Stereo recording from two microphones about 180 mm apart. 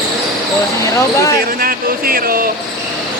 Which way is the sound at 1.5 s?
55° right (ahead or behind).